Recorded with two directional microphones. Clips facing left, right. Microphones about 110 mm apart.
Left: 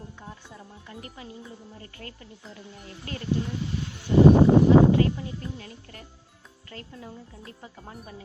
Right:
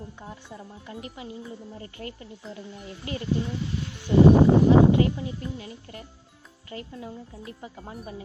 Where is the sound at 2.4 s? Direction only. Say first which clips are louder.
Right 6 dB; centre (ahead or behind).